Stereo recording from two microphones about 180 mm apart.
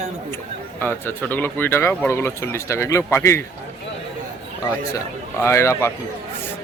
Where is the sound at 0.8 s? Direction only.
10° left (ahead or behind).